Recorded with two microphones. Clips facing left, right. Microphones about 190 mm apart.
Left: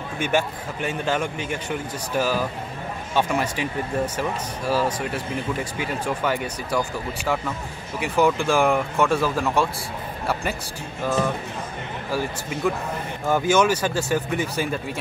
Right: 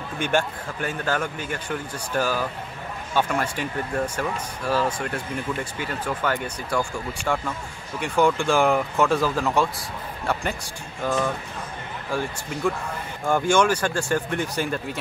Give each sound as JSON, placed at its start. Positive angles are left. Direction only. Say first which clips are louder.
{"t": 0.2, "sound": "speech", "louder": "left 1 dB", "side_deg": 5}
{"t": 1.0, "sound": "speech", "louder": "left 1 dB", "side_deg": 25}
{"t": 1.5, "sound": "speech", "louder": "left 2 dB", "side_deg": 5}
{"t": 11.1, "sound": "speech", "louder": "left 1 dB", "side_deg": 5}